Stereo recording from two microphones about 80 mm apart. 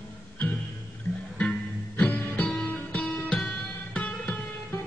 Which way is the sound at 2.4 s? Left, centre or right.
Centre.